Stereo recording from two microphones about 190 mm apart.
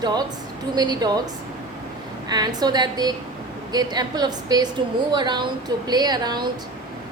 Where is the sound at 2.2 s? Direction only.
20° right (ahead or behind).